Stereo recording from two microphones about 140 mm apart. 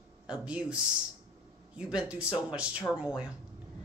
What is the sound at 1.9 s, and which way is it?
Speech, 5° right (ahead or behind).